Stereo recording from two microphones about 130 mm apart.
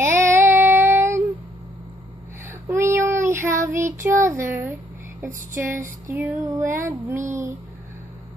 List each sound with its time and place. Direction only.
0.0 s child singing: 20° right (ahead or behind)
2.7 s child singing: 20° right (ahead or behind)
4.2 s speech: 20° right (ahead or behind)
5.2 s a sound: 20° right (ahead or behind)